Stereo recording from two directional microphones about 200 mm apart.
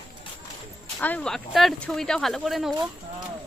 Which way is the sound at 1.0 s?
10° left (ahead or behind).